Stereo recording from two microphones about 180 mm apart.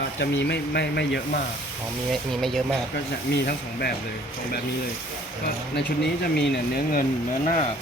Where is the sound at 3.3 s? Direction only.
60° left (ahead or behind).